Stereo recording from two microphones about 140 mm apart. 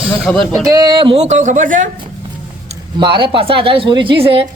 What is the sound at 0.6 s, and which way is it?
Speech, 25° right (ahead or behind).